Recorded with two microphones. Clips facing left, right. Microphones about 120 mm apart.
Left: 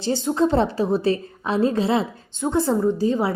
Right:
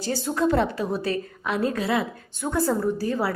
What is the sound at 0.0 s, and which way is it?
A woman's voice, 25° left (ahead or behind).